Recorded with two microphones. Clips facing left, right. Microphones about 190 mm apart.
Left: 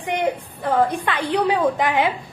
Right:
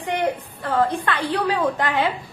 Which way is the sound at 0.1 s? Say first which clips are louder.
Left 1 dB; 15° left (ahead or behind).